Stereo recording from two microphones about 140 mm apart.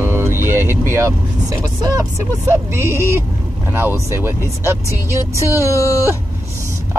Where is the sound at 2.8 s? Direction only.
20° right (ahead or behind).